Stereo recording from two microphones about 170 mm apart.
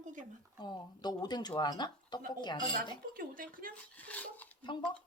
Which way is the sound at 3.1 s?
55° right (ahead or behind).